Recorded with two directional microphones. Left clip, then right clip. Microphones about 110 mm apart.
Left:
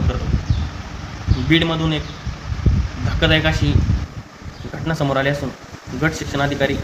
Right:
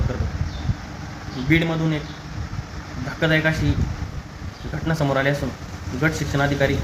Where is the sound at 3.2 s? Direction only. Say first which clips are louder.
Left 3 dB; 25° left (ahead or behind).